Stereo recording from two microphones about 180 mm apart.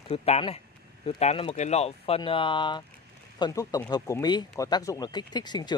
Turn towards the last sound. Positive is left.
turn(degrees=25)  # may be behind; listen again after turning